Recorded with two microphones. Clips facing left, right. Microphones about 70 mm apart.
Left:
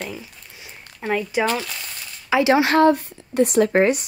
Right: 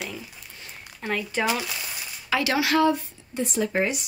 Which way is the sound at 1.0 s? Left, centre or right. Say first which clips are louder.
Left 5 dB; centre.